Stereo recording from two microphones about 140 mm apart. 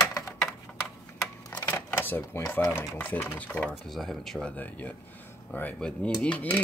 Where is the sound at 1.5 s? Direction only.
15° left (ahead or behind).